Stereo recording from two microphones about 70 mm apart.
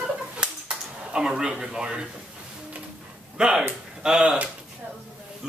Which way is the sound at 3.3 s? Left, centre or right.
Centre.